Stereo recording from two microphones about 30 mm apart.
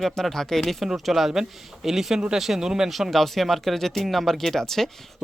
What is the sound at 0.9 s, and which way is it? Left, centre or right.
Speech, centre.